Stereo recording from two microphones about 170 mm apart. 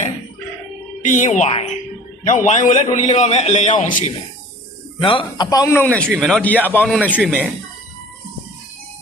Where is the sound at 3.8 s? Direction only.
50° left (ahead or behind).